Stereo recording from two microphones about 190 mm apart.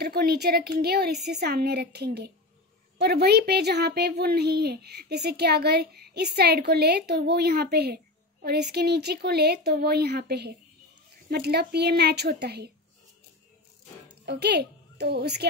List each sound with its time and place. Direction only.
0.0 s a child's voice: 55° right (ahead or behind)
14.2 s a child's voice: 60° right (ahead or behind)